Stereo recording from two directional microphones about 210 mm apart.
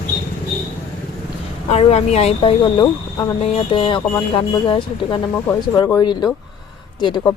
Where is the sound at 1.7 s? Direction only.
30° left (ahead or behind).